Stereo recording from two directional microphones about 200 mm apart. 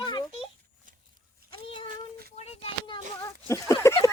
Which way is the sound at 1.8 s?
45° right (ahead or behind).